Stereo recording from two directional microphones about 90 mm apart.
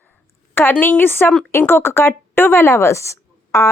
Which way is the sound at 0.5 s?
20° left (ahead or behind).